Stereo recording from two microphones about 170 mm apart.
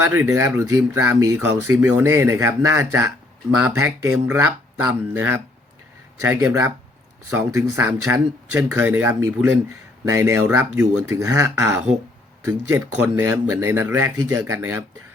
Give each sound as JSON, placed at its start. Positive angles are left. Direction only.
{"t": 0.0, "sound": "speech", "side_deg": -15}
{"t": 4.1, "sound": "speech", "side_deg": -15}